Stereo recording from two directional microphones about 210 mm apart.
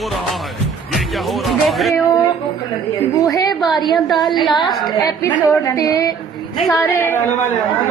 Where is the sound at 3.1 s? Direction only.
15° left (ahead or behind).